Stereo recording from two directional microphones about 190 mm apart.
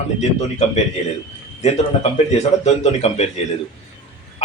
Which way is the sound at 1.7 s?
35° left (ahead or behind).